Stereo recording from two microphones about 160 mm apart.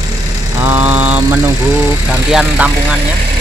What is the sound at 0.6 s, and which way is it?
Speech, 10° right (ahead or behind).